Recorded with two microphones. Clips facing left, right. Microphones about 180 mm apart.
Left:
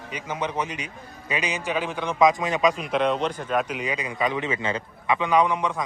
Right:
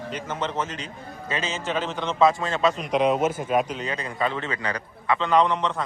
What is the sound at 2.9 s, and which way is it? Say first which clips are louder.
Speech: right 2 dB; 5° right (ahead or behind).